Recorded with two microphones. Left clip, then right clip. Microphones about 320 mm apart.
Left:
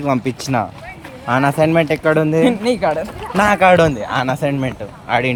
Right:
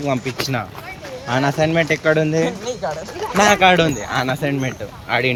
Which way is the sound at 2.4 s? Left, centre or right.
Left.